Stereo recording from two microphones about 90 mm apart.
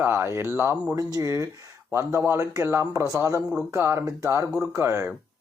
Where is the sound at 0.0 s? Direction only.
25° right (ahead or behind).